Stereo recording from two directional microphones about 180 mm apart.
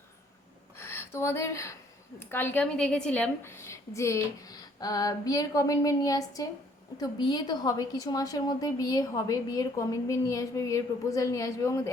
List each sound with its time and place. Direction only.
0.8 s a woman's voice: 15° left (ahead or behind)